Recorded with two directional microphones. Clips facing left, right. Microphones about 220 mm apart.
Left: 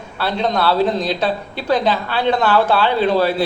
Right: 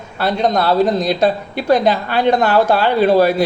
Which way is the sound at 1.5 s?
10° right (ahead or behind).